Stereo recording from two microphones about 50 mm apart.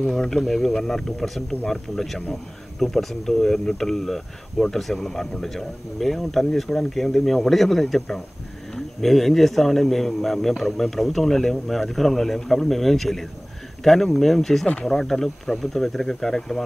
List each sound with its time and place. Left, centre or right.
0.1 s speech: centre